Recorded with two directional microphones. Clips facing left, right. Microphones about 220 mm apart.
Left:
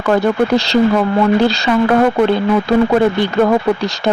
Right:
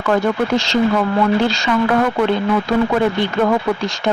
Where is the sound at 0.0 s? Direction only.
35° left (ahead or behind).